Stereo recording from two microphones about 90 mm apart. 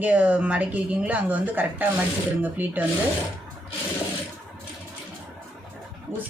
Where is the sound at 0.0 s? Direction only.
15° right (ahead or behind).